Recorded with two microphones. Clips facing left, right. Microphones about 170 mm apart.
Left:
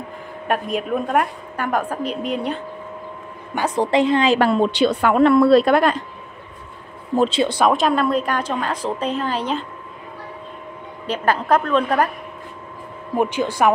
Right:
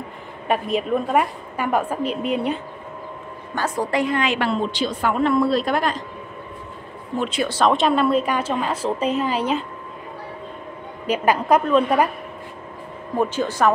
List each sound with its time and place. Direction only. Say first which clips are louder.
0.7 s a woman's voice: right 1 dB; centre (ahead or behind)
3.5 s a woman's voice: left 4 dB; 20° left (ahead or behind)
4.4 s a woman's voice: left 6 dB; 55° left (ahead or behind)
7.2 s a woman's voice: left 6 dB; 30° left (ahead or behind)
7.4 s speech: left 1 dB; 15° left (ahead or behind)
7.7 s a woman's voice: even; centre (ahead or behind)
11.1 s a woman's voice: right 1 dB; 10° right (ahead or behind)
13.1 s speech: left 2 dB; 15° left (ahead or behind)